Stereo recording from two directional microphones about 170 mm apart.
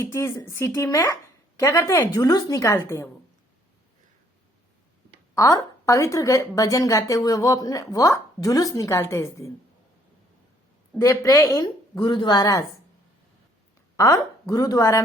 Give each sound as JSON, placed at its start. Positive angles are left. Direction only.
{"t": 0.0, "sound": "a woman's voice", "side_deg": 15}
{"t": 5.3, "sound": "a woman's voice", "side_deg": 20}
{"t": 10.9, "sound": "a woman's voice", "side_deg": 15}
{"t": 13.9, "sound": "a woman's voice", "side_deg": 15}